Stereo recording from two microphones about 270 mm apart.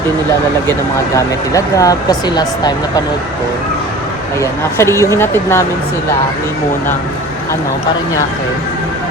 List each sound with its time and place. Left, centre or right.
1.1 s speech: centre
4.4 s speech: centre